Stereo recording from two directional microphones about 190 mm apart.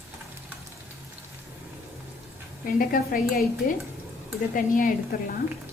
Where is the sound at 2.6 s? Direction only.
50° left (ahead or behind).